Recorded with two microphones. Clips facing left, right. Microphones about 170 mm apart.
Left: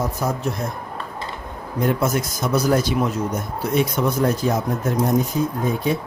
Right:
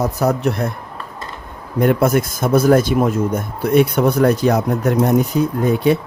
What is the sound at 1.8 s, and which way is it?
A man's voice, 60° right (ahead or behind).